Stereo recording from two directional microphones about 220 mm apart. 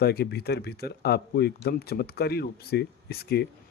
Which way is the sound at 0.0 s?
45° left (ahead or behind).